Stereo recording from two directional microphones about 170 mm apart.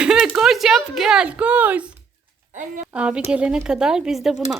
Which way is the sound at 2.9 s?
5° right (ahead or behind).